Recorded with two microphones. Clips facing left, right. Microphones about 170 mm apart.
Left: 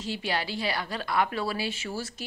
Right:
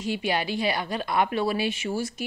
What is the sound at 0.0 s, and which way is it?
A woman's voice, 15° right (ahead or behind).